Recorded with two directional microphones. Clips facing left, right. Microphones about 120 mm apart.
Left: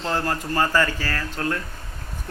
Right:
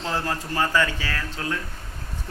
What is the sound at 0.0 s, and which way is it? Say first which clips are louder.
Speech: left 2 dB; centre (ahead or behind).